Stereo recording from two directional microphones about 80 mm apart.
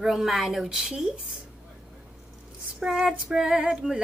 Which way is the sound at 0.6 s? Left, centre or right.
Centre.